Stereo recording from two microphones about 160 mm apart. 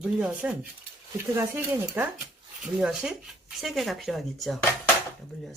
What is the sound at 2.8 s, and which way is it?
Speech, 5° right (ahead or behind).